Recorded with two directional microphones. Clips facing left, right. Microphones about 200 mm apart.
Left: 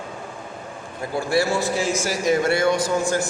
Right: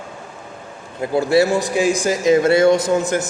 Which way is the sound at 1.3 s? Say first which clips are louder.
Right 4 dB; 20° right (ahead or behind).